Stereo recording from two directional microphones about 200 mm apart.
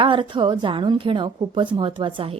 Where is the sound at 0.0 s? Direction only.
25° right (ahead or behind).